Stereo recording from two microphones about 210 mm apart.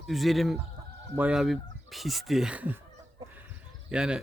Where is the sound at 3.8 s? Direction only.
5° right (ahead or behind).